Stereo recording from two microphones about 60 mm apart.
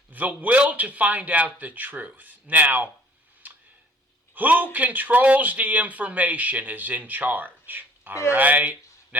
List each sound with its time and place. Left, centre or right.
0.1 s speech: right
3.4 s tick: right
4.4 s speech: right